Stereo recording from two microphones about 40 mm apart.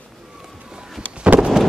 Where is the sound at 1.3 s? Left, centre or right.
Right.